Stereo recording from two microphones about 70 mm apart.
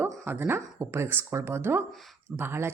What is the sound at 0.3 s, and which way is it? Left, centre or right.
Speech, right.